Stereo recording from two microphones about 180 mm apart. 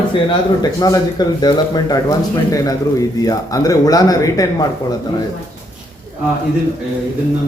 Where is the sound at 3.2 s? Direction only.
20° left (ahead or behind).